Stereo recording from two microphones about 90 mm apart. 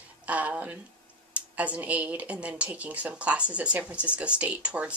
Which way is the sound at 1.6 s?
15° right (ahead or behind).